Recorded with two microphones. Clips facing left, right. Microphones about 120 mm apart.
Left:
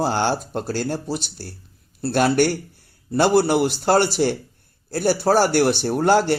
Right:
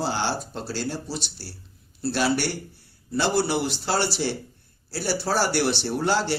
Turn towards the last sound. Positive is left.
turn(degrees=50)  # may be behind; listen again after turning